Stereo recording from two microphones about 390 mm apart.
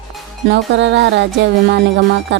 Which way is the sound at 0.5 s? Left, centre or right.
Right.